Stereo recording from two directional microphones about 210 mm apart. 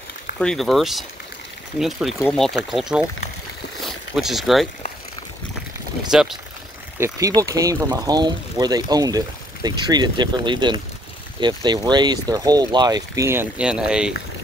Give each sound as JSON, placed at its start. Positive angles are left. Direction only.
{"t": 0.4, "sound": "speech", "side_deg": 0}
{"t": 7.0, "sound": "speech", "side_deg": -15}